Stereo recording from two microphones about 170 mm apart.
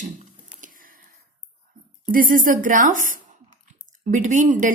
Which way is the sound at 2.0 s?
55° right (ahead or behind).